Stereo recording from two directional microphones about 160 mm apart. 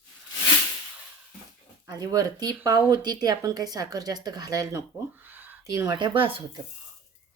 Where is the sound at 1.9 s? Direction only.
25° right (ahead or behind).